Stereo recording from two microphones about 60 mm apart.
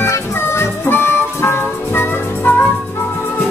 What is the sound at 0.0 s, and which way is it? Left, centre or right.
Music, left.